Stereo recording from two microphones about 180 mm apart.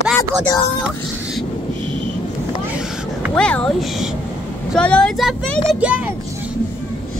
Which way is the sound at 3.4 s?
5° left (ahead or behind).